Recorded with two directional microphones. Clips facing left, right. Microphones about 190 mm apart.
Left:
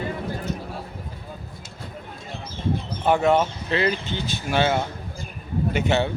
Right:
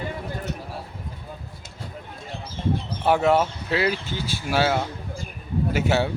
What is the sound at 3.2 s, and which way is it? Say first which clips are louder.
Speech: even; 5° right (ahead or behind).